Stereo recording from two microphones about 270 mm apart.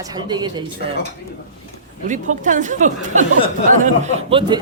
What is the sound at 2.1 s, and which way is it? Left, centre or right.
Speech, right.